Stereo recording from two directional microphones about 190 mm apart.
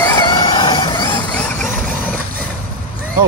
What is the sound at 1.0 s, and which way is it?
Vehicle, 5° left (ahead or behind).